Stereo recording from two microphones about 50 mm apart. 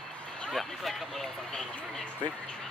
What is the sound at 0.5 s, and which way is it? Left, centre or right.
Speech, centre.